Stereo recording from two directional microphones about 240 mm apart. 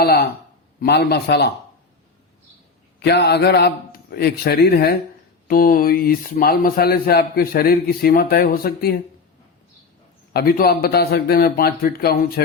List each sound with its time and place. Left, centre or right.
0.0 s a man's voice: left
3.0 s a man's voice: left
10.3 s a man's voice: left